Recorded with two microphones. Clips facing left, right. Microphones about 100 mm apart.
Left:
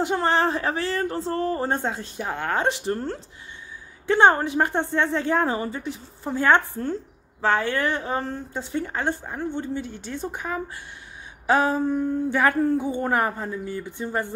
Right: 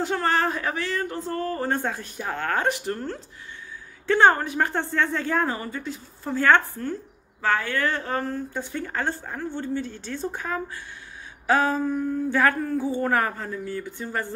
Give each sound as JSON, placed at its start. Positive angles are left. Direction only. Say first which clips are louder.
{"t": 0.0, "sound": "speech", "louder": "left 2 dB", "side_deg": 20}